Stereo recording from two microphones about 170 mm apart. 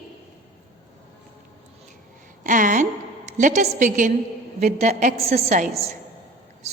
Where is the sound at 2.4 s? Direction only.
50° right (ahead or behind).